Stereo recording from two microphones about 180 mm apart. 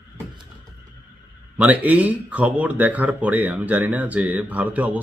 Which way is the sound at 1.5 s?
10° right (ahead or behind).